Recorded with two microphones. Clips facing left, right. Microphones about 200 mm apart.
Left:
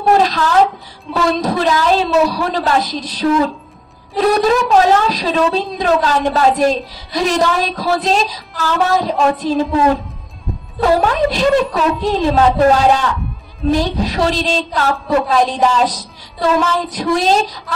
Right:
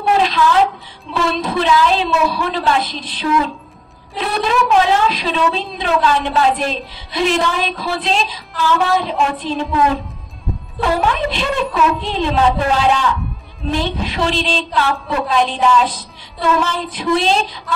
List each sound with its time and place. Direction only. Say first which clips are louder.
0.0 s a woman's voice: left 2 dB; 40° left (ahead or behind)
10.8 s a woman's voice: left 4 dB; 40° left (ahead or behind)